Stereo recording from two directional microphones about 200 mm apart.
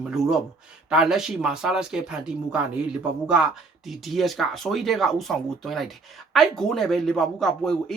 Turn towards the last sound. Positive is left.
turn(degrees=0)  # may be behind; listen again after turning